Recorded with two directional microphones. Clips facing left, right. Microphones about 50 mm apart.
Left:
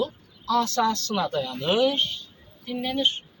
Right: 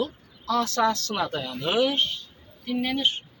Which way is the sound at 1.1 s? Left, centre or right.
Right.